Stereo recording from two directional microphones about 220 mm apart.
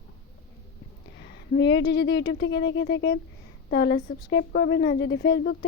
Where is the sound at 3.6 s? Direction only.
45° left (ahead or behind).